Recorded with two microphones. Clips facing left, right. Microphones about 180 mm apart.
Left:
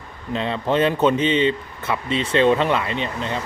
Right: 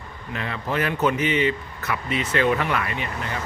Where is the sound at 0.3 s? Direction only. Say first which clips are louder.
Left 6 dB; 25° left (ahead or behind).